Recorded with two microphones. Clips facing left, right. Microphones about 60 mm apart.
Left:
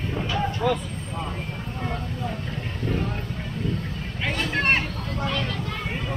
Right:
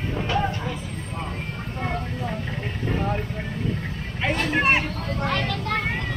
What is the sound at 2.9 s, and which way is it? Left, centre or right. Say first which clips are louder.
Vehicle: right 2 dB; right.